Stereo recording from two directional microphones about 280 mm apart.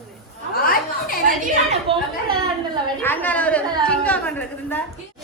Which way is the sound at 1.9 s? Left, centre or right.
Centre.